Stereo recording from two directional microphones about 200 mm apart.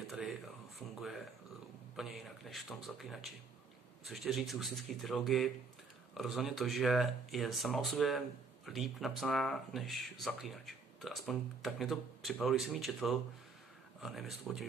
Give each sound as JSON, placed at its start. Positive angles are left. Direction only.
{"t": 0.1, "sound": "speech", "side_deg": 0}
{"t": 2.0, "sound": "speech", "side_deg": 0}